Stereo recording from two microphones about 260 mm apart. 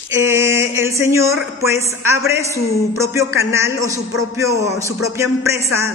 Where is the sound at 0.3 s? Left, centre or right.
Centre.